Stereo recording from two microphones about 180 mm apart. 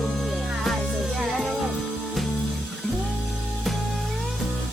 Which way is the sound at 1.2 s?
Centre (ahead or behind).